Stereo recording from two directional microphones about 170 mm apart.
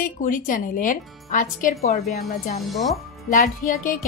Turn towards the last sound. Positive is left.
turn(degrees=55)  # may be behind; listen again after turning